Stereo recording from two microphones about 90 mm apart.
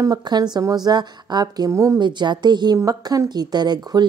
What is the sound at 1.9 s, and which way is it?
Speech, 55° right (ahead or behind).